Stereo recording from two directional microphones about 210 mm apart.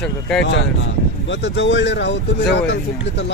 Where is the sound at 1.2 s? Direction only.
55° left (ahead or behind).